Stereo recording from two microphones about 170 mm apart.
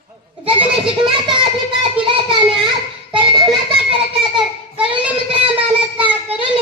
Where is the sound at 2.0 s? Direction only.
30° right (ahead or behind).